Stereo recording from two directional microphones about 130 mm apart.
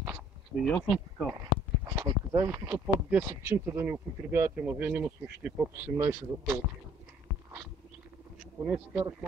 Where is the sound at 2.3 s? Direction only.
25° right (ahead or behind).